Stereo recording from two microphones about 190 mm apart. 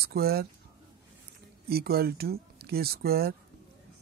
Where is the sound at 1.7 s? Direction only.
55° right (ahead or behind).